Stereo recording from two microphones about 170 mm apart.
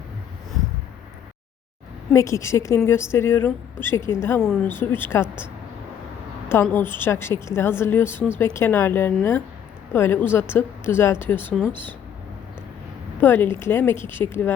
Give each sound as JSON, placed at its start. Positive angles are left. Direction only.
{"t": 2.1, "sound": "a woman's voice", "side_deg": 15}
{"t": 4.4, "sound": "a woman's voice", "side_deg": 5}
{"t": 6.5, "sound": "a woman's voice", "side_deg": 15}
{"t": 13.2, "sound": "a woman's voice", "side_deg": 15}